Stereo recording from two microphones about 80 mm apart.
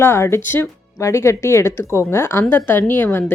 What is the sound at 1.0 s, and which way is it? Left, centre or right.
Speech, left.